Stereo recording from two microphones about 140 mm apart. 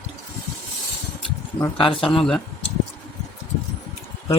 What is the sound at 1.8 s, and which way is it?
Speech, 40° left (ahead or behind).